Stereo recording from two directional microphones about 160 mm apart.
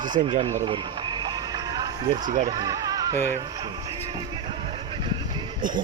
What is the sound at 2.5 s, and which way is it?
Speech, 20° right (ahead or behind).